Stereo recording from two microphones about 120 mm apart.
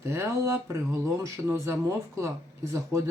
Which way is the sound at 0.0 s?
25° right (ahead or behind).